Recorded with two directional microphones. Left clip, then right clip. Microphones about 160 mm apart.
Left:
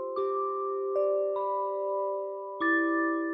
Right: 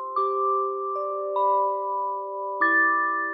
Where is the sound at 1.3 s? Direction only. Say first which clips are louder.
Right 8 dB; 5° right (ahead or behind).